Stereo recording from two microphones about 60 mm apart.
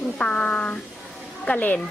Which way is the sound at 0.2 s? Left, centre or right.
Centre.